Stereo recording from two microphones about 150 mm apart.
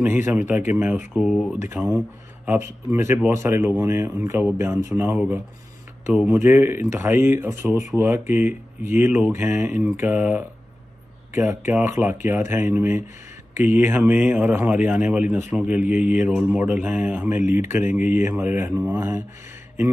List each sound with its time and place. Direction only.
0.0 s speech: 15° right (ahead or behind)
1.1 s speech: 5° right (ahead or behind)
1.7 s speech: 15° right (ahead or behind)
17.4 s speech: 55° left (ahead or behind)
18.2 s speech: 15° right (ahead or behind)